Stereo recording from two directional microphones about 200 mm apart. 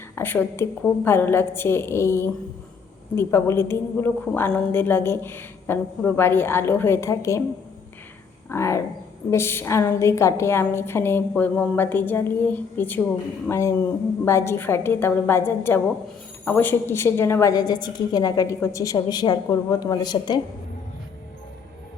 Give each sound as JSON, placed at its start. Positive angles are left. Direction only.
{"t": 0.2, "sound": "a woman's voice", "side_deg": 10}
{"t": 8.4, "sound": "a woman's voice", "side_deg": 15}